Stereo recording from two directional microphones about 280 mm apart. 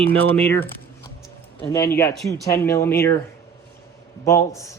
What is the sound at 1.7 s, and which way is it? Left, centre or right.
Speech, centre.